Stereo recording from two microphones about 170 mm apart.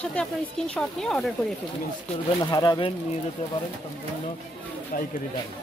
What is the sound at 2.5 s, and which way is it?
Speech, 25° left (ahead or behind).